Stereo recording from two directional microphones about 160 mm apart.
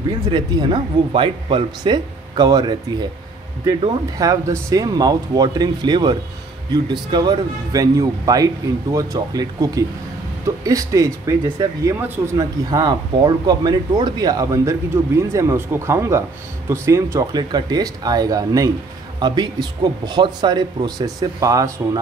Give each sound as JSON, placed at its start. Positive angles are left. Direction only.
{"t": 0.3, "sound": "speech", "side_deg": -30}